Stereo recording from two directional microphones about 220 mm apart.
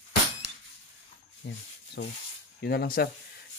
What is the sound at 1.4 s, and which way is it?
Speech, 55° left (ahead or behind).